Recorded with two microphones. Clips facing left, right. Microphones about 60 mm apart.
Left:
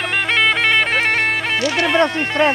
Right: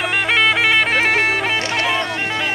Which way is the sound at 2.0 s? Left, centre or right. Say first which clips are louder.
Left 6 dB; left.